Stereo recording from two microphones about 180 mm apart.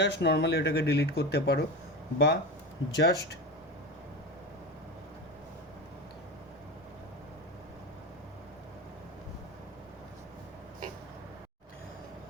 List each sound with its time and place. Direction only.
0.0 s speech: 70° left (ahead or behind)